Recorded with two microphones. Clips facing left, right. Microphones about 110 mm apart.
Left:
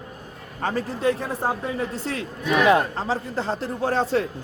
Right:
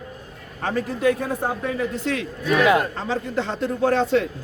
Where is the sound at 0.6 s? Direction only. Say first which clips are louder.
Right 2 dB; 30° left (ahead or behind).